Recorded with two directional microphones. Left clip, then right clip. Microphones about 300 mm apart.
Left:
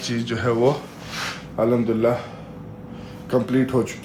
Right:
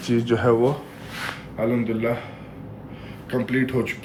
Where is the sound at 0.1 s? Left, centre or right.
Centre.